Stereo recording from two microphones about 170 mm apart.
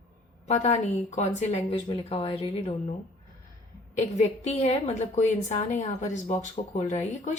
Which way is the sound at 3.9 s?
40° left (ahead or behind).